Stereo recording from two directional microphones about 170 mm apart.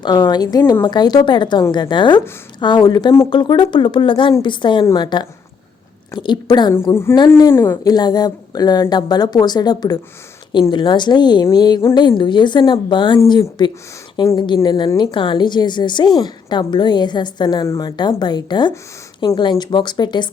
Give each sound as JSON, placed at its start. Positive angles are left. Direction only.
{"t": 0.0, "sound": "a woman's voice", "side_deg": 25}